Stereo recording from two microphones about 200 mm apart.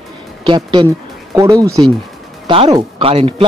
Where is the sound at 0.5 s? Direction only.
20° right (ahead or behind).